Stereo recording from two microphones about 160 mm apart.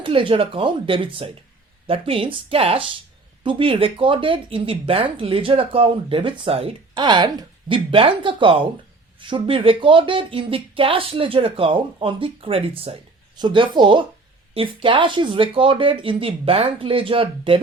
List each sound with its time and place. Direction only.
0.0 s speech: 35° right (ahead or behind)